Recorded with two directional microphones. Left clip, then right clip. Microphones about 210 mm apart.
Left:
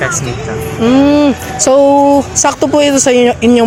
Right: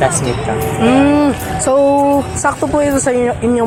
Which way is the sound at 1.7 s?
60° left (ahead or behind).